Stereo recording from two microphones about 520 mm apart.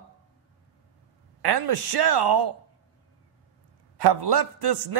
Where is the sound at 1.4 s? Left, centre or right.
Right.